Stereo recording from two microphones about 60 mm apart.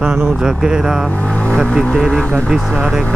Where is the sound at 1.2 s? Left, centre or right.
Centre.